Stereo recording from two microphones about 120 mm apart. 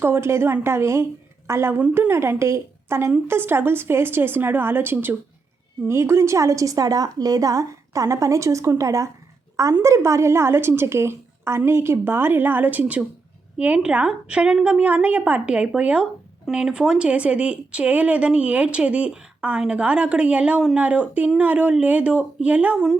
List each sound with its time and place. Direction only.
0.0 s a woman's voice: 20° right (ahead or behind)